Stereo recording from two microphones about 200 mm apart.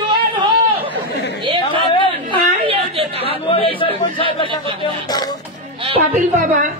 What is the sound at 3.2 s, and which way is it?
Chatter, 25° left (ahead or behind).